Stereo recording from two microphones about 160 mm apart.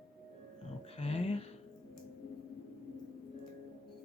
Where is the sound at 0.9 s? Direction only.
40° left (ahead or behind).